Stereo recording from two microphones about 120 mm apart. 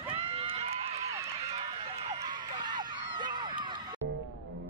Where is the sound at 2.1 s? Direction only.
40° right (ahead or behind).